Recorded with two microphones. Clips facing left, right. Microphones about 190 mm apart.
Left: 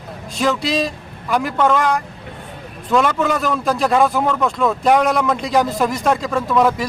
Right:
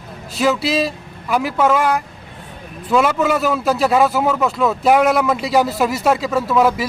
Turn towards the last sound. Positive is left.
turn(degrees=-5)  # may be behind; listen again after turning